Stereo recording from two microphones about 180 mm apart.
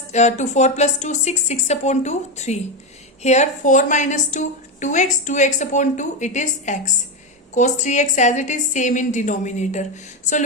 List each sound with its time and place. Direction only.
0.1 s a woman's voice: 40° left (ahead or behind)